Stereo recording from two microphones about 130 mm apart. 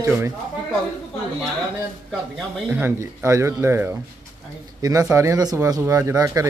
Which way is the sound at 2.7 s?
20° right (ahead or behind).